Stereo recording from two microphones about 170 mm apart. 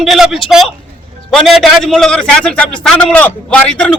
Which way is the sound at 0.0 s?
Centre (ahead or behind).